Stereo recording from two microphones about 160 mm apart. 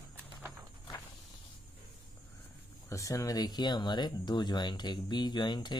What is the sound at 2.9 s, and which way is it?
Speech, 20° left (ahead or behind).